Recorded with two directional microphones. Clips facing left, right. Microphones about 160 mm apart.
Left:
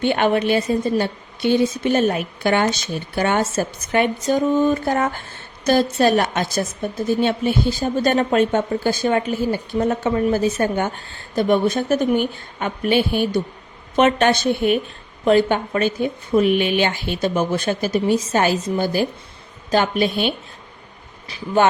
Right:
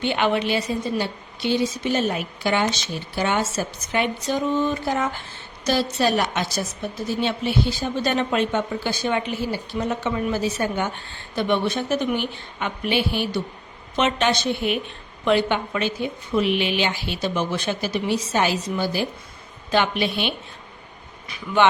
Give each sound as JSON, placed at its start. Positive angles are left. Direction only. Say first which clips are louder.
{"t": 0.0, "sound": "a woman's voice", "louder": "left 4 dB", "side_deg": 50}
{"t": 21.2, "sound": "speech", "louder": "left 2 dB", "side_deg": 35}